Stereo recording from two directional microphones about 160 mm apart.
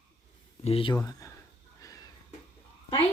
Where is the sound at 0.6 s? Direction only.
35° left (ahead or behind).